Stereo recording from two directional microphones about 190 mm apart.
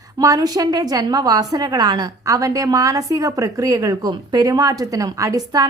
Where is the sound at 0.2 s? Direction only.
20° right (ahead or behind).